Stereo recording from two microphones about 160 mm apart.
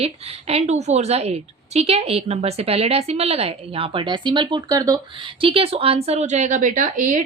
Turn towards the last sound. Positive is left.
turn(degrees=-50)  # may be behind; listen again after turning